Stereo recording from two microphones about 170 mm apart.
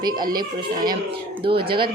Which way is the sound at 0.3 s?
25° right (ahead or behind).